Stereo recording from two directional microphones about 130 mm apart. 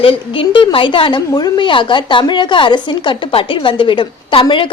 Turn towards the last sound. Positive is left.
turn(degrees=40)  # may be behind; listen again after turning